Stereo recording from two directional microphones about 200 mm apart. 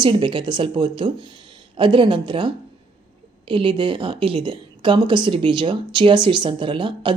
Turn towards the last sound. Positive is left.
turn(degrees=-25)  # may be behind; listen again after turning